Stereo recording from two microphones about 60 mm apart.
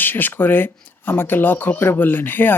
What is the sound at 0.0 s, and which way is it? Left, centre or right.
Speech, left.